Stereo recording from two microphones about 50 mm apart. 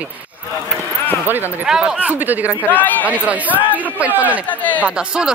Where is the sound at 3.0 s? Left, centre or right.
Right.